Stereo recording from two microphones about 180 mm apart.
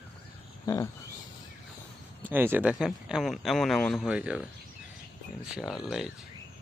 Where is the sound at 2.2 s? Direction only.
10° right (ahead or behind).